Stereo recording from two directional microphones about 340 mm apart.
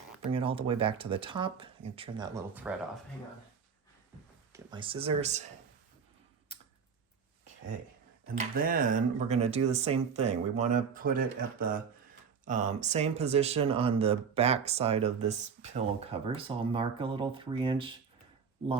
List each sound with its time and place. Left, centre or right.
0.3 s speech: centre
4.5 s speech: centre
8.5 s speech: right